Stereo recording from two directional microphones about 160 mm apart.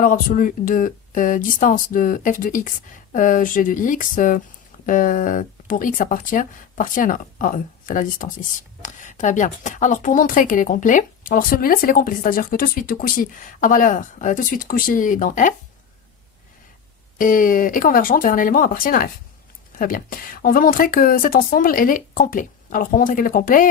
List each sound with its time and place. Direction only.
0.0 s speech: 60° left (ahead or behind)
17.2 s speech: 55° left (ahead or behind)